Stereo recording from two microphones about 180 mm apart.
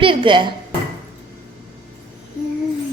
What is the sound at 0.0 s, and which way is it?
Speech, 30° right (ahead or behind).